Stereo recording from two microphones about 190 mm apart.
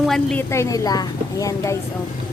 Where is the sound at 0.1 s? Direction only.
5° left (ahead or behind).